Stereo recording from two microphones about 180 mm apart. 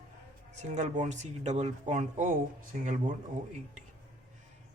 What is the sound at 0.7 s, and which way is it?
Speech, 40° right (ahead or behind).